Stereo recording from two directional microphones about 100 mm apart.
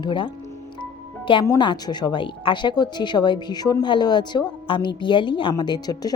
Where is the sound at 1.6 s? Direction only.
50° left (ahead or behind).